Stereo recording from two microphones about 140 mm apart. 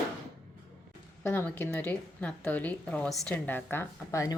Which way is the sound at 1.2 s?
15° left (ahead or behind).